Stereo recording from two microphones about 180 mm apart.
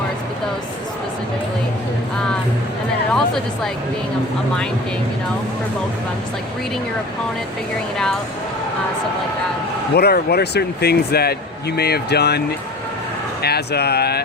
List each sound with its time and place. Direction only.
3.1 s speech: centre (ahead or behind)
9.9 s speech: 60° left (ahead or behind)
13.4 s speech: 65° left (ahead or behind)